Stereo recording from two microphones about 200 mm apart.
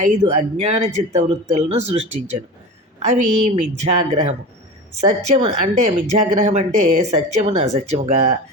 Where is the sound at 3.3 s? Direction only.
35° right (ahead or behind).